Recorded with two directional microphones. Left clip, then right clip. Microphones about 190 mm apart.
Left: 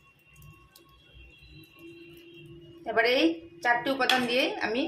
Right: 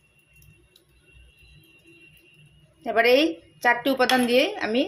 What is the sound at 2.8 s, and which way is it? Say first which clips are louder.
A woman's voice: right 5 dB; 40° right (ahead or behind).